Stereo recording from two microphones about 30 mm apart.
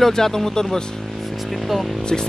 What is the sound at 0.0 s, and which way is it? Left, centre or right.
Speech, centre.